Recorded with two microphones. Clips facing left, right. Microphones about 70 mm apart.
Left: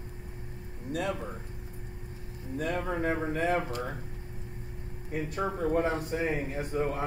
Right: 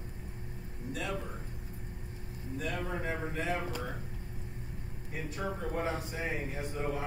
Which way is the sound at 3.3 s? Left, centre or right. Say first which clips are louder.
Left 6 dB; left.